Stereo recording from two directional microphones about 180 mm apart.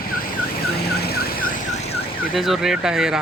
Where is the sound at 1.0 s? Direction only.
60° left (ahead or behind).